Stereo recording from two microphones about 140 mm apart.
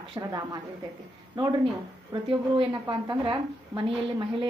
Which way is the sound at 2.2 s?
35° right (ahead or behind).